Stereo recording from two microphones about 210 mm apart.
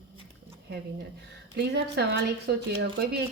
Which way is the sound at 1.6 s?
50° right (ahead or behind).